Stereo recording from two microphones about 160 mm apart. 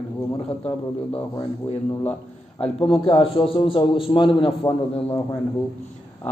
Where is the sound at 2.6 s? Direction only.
35° left (ahead or behind).